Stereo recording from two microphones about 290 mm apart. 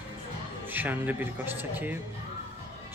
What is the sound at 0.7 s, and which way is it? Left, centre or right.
Speech, centre.